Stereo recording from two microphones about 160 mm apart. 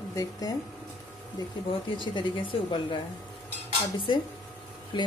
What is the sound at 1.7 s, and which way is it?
Speech, 30° left (ahead or behind).